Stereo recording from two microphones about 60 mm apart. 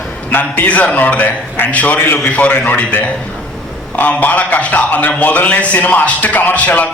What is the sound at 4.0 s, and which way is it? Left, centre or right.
A man's voice, left.